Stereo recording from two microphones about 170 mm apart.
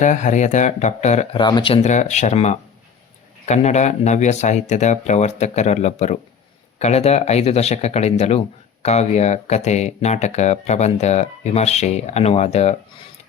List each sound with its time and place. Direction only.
0.0 s speech: 45° left (ahead or behind)
1.4 s speech: 25° left (ahead or behind)
1.8 s speech: 45° left (ahead or behind)